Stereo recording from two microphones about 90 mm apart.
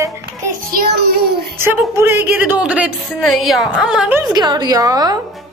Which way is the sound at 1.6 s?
25° right (ahead or behind).